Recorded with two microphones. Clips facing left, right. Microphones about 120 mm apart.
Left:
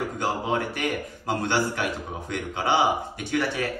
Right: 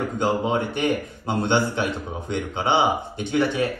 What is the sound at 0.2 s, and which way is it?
A man's voice, 25° right (ahead or behind).